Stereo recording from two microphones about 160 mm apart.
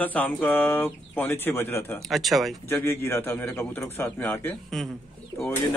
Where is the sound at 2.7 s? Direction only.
15° left (ahead or behind).